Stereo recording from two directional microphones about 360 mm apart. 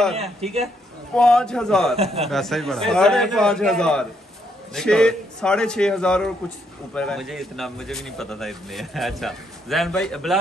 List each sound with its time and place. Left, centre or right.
0.1 s speech: centre
1.1 s a man's voice: centre